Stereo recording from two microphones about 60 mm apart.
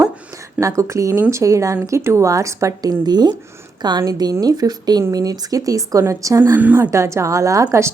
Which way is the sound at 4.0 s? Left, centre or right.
Right.